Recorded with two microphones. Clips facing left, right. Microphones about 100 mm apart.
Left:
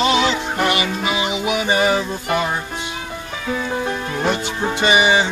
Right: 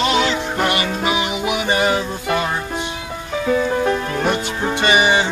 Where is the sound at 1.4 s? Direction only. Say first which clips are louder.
Even; 15° right (ahead or behind).